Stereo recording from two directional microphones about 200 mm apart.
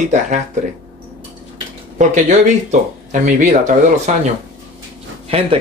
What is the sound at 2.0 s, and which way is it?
Speech, 35° right (ahead or behind).